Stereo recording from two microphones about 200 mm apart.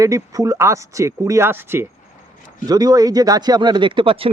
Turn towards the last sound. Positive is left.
turn(degrees=-25)  # may be behind; listen again after turning